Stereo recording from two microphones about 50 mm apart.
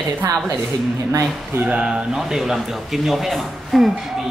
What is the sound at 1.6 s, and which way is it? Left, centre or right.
Speech, right.